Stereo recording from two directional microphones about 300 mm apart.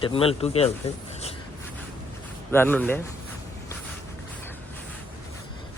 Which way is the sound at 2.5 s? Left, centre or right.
Centre.